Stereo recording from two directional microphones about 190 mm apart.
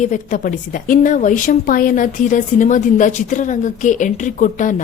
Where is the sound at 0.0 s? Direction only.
40° left (ahead or behind).